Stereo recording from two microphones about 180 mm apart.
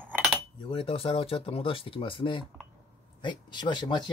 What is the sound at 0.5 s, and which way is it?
Speech, 30° left (ahead or behind).